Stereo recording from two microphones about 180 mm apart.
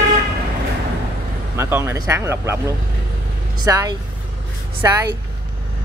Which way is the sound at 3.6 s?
20° right (ahead or behind).